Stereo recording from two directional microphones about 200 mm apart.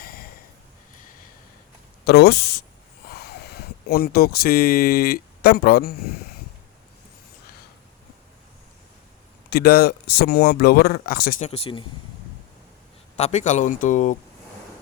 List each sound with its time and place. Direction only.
0.0 s snort: 45° left (ahead or behind)
2.0 s speech: 55° left (ahead or behind)
9.5 s speech: 50° left (ahead or behind); by 11.9 s 30° left (ahead or behind)
13.1 s speech: 35° left (ahead or behind)